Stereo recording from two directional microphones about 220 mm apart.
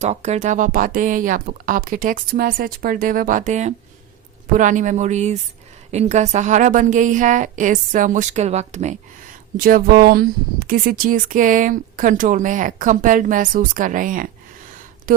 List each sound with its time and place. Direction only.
0.0 s speech: 30° right (ahead or behind)